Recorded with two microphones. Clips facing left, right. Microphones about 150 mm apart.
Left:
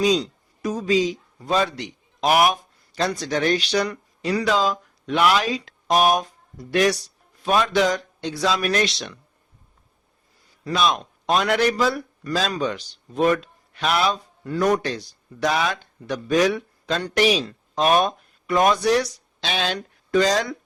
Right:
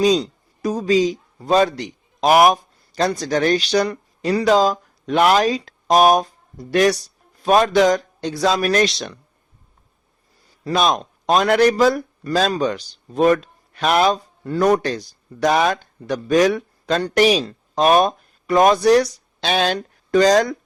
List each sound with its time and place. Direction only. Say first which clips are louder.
0.0 s a man's voice: right 4 dB; 35° right (ahead or behind)
10.6 s a man's voice: right 3 dB; 40° right (ahead or behind)